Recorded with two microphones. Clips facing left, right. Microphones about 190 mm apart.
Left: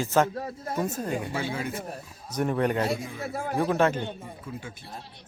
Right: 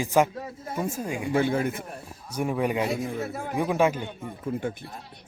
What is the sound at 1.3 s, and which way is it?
Speech, 50° right (ahead or behind).